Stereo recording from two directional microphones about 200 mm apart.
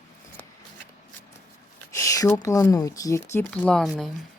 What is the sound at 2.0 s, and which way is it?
Speech, 15° left (ahead or behind).